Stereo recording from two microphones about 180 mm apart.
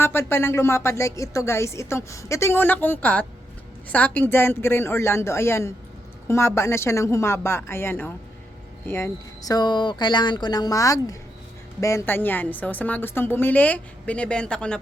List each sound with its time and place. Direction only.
0.0 s a woman's voice: 10° left (ahead or behind)